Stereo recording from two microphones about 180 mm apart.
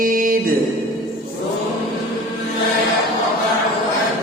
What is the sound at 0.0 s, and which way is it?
Music, 50° right (ahead or behind).